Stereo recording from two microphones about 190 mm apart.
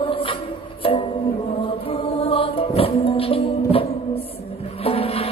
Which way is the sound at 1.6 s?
30° left (ahead or behind).